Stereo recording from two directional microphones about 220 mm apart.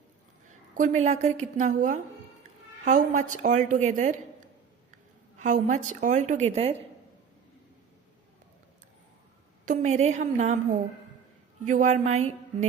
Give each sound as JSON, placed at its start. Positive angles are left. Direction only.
{"t": 0.7, "sound": "a woman's voice", "side_deg": -35}
{"t": 9.6, "sound": "a woman's voice", "side_deg": -30}